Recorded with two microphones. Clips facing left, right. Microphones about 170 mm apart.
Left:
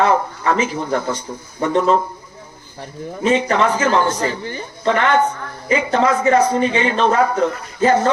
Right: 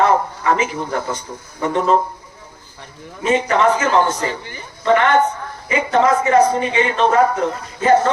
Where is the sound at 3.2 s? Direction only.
35° left (ahead or behind).